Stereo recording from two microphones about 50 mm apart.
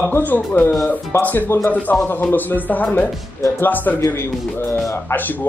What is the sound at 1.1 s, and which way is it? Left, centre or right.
Speech, left.